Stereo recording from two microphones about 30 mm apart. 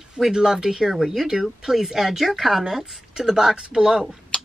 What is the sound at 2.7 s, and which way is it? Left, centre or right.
Speech, centre.